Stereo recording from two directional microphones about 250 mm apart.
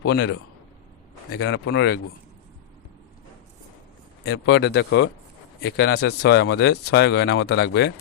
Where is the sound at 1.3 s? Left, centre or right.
Left.